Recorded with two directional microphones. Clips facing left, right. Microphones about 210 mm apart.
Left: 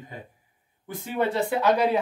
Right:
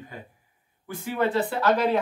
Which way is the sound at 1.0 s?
20° left (ahead or behind).